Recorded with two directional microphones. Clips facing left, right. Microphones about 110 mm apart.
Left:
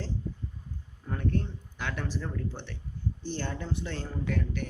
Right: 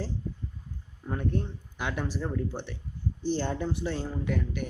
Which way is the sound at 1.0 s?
15° right (ahead or behind).